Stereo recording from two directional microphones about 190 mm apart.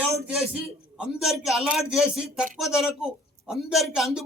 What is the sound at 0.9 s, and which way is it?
Speech, 5° right (ahead or behind).